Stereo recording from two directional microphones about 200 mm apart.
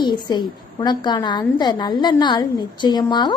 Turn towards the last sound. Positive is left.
turn(degrees=20)  # may be behind; listen again after turning